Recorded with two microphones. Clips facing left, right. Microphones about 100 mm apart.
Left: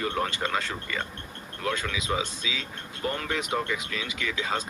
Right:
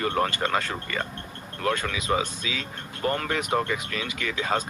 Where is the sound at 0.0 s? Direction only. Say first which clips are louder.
Right 3 dB; 55° right (ahead or behind).